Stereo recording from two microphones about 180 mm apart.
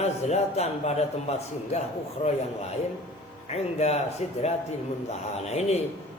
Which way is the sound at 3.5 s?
35° left (ahead or behind).